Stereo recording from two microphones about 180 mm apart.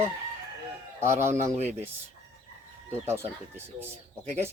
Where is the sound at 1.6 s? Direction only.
35° right (ahead or behind).